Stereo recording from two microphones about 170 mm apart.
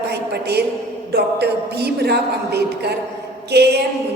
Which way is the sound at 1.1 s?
70° right (ahead or behind).